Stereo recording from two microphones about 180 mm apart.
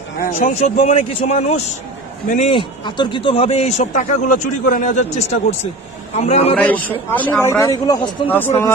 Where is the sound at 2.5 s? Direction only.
25° left (ahead or behind).